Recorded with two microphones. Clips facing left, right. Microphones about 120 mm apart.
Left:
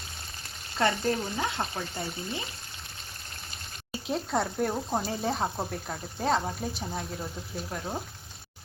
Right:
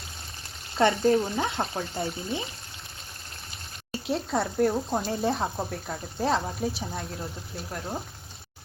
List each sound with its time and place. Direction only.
1.0 s frying: 20° right (ahead or behind)
3.9 s speech: centre (ahead or behind)